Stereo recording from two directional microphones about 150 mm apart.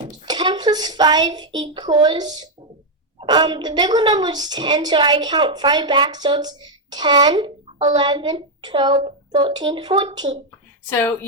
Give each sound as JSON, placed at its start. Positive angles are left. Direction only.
{"t": 0.3, "sound": "a woman's voice", "side_deg": -30}
{"t": 10.9, "sound": "a woman's voice", "side_deg": 15}